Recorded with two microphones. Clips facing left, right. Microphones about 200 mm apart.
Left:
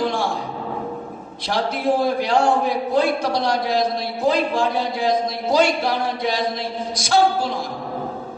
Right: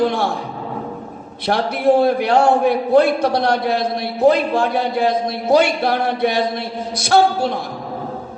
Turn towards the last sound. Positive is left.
turn(degrees=-60)  # may be behind; listen again after turning